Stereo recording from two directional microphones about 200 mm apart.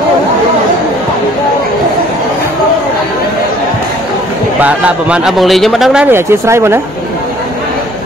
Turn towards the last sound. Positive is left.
turn(degrees=-15)  # may be behind; listen again after turning